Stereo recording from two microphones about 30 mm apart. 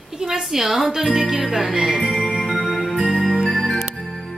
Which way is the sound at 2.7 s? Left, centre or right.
Centre.